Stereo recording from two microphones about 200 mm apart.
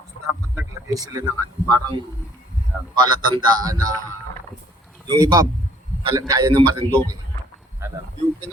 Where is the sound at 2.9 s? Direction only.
20° right (ahead or behind).